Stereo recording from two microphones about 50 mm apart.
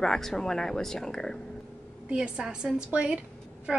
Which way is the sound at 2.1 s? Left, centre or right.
Centre.